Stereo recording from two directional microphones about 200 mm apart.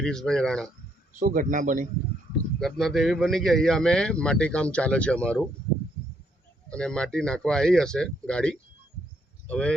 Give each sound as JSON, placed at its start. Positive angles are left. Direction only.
{"t": 0.0, "sound": "speech", "side_deg": 5}
{"t": 1.2, "sound": "a man's voice", "side_deg": -40}
{"t": 2.6, "sound": "speech", "side_deg": 0}
{"t": 6.7, "sound": "speech", "side_deg": 5}